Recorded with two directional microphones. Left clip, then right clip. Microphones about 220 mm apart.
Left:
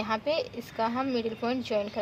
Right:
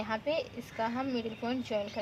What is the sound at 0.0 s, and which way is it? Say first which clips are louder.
A woman's voice: left 4 dB; 35° left (ahead or behind).